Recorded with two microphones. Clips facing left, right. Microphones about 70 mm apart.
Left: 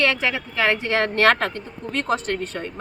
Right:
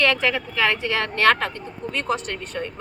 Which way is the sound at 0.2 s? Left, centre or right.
Centre.